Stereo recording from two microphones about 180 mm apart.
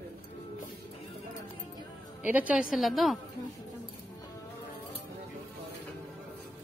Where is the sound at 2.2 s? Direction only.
10° right (ahead or behind).